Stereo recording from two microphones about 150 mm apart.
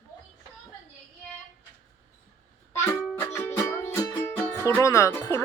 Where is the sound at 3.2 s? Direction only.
15° left (ahead or behind).